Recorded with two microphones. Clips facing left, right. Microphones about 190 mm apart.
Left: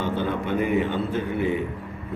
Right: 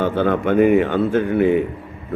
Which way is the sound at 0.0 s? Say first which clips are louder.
Right 7 dB; 55° right (ahead or behind).